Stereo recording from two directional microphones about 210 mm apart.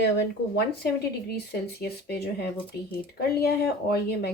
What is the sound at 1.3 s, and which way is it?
Speech, 50° left (ahead or behind).